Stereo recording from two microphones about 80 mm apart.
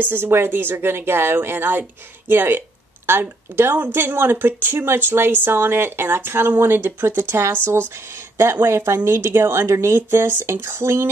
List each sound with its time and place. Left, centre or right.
0.0 s speech: right